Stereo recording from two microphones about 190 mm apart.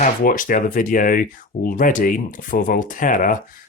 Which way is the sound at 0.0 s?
45° left (ahead or behind).